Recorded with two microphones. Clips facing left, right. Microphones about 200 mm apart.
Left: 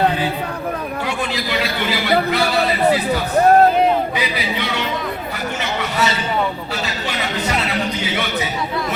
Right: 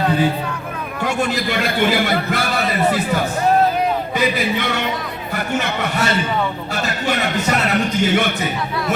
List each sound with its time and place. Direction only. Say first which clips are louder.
1.0 s speech: right 8 dB; 50° right (ahead or behind)
4.2 s a man's voice: right 4 dB; 50° right (ahead or behind)
5.8 s a man's voice: right 1 dB; 55° right (ahead or behind)